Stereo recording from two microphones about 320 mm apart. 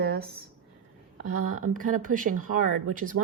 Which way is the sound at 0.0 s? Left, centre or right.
Right.